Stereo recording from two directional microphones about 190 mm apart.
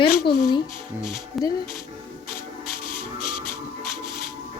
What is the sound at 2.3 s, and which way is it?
Music, 50° left (ahead or behind).